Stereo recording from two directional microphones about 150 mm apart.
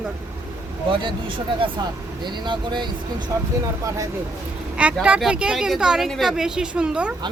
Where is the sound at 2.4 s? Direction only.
30° right (ahead or behind).